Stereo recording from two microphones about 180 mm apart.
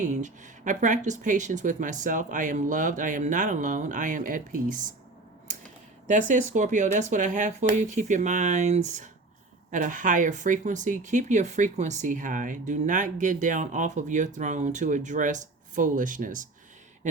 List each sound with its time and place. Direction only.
0.0 s speech: 40° right (ahead or behind)
6.1 s speech: 45° right (ahead or behind)